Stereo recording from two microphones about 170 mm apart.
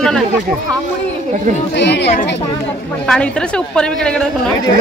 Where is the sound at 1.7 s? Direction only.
85° left.